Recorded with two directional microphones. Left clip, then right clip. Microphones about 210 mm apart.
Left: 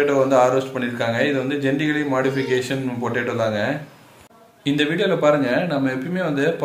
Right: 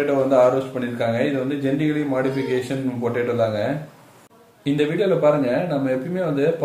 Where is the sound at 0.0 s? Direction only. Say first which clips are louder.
Even; 5° right (ahead or behind).